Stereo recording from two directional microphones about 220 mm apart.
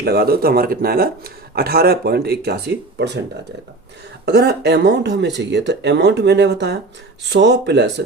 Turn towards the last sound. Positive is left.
turn(degrees=-50)  # may be behind; listen again after turning